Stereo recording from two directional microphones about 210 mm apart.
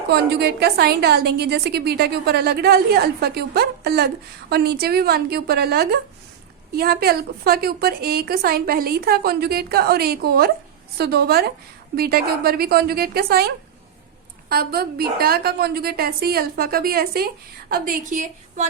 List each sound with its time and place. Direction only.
0.1 s a woman's voice: 50° right (ahead or behind)
14.5 s a woman's voice: 45° right (ahead or behind)